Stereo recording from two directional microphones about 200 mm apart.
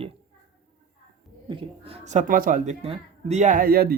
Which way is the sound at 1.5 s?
25° right (ahead or behind).